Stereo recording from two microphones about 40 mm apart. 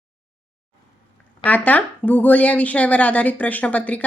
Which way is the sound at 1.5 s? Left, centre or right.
Left.